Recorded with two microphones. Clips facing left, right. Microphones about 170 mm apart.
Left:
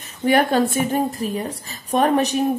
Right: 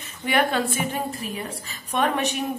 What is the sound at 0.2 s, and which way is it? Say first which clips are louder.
A woman's voice: left 6 dB; 40° left (ahead or behind).